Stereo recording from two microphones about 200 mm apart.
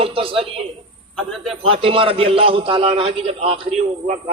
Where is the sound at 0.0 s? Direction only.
25° right (ahead or behind).